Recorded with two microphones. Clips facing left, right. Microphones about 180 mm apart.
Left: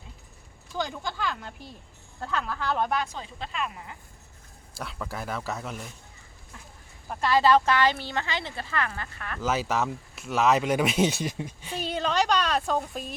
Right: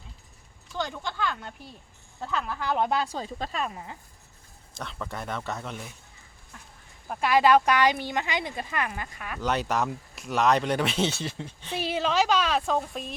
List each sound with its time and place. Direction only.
0.8 s a woman's voice: 5° left (ahead or behind)
2.6 s speech: 15° right (ahead or behind)
2.9 s speech: 30° right (ahead or behind)
4.8 s a woman's voice: 5° left (ahead or behind)
7.1 s speech: 10° right (ahead or behind)
9.4 s speech: 5° left (ahead or behind)
11.8 s a woman's voice: 5° right (ahead or behind)